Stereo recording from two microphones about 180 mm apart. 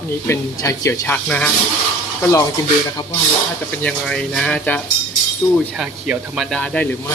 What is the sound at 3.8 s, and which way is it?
Speech, 5° left (ahead or behind).